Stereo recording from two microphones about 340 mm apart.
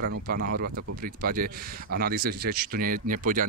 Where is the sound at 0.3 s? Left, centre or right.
Right.